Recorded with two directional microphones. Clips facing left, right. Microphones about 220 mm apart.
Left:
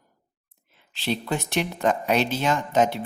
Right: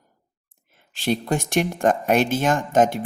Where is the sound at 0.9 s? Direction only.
45° right (ahead or behind).